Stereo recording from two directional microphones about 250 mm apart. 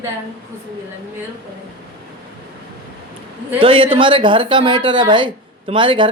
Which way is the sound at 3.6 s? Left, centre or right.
Right.